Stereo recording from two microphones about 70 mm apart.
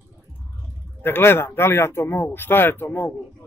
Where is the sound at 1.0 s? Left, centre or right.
Left.